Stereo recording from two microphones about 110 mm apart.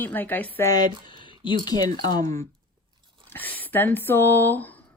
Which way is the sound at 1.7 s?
30° left (ahead or behind).